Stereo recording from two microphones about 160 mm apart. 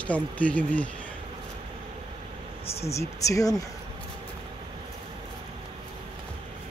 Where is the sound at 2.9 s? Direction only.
20° left (ahead or behind).